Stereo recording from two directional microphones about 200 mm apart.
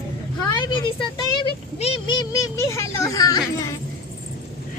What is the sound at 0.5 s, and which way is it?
Speech, 20° left (ahead or behind).